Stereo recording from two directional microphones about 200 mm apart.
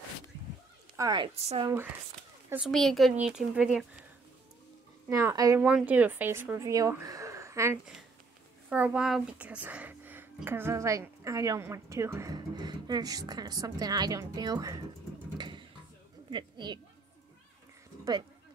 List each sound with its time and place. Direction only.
0.9 s speech: 20° right (ahead or behind)
2.5 s speech: centre (ahead or behind)
5.1 s speech: 15° right (ahead or behind)
15.3 s a sound: 20° right (ahead or behind)
16.3 s a woman's voice: 25° right (ahead or behind)